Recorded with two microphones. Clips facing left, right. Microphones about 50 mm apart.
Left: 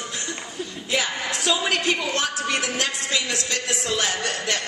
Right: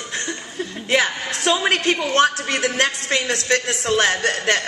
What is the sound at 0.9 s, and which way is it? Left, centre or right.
A woman's voice, right.